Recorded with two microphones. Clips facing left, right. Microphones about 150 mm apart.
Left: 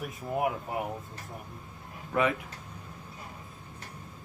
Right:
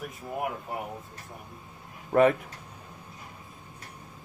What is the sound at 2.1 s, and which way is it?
Speech, 50° right (ahead or behind).